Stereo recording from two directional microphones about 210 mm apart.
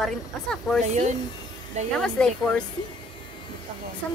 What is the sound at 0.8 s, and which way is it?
Speech, 30° right (ahead or behind).